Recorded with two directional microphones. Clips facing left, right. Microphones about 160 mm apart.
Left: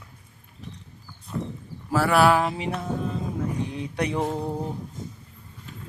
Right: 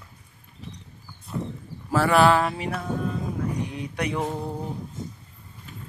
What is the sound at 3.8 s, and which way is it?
Music, 30° left (ahead or behind).